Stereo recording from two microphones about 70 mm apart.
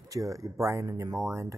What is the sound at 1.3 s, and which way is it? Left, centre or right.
Speech, right.